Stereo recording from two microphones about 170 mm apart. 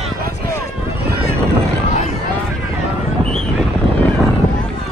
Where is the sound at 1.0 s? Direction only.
65° right (ahead or behind).